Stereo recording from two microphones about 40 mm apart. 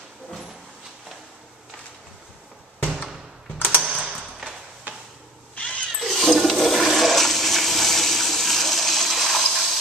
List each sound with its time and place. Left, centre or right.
2.8 s fireworks: centre
3.8 s typing: centre
5.6 s cat: left
5.9 s toilet flush: centre